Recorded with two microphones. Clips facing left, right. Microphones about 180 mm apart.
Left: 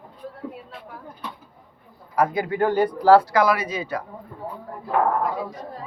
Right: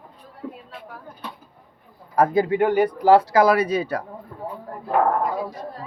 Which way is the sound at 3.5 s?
35° right (ahead or behind).